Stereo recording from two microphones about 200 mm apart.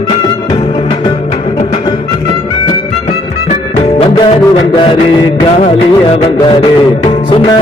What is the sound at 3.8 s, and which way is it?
Music, 30° left (ahead or behind).